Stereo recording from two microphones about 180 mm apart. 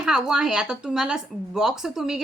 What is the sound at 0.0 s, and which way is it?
Speech, 5° right (ahead or behind).